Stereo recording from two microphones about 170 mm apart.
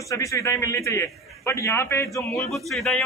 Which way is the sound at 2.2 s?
Centre (ahead or behind).